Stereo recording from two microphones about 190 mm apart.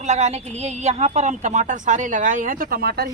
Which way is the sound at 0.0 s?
35° right (ahead or behind).